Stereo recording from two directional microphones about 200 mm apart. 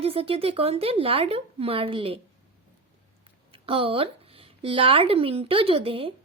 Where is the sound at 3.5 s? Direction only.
25° right (ahead or behind).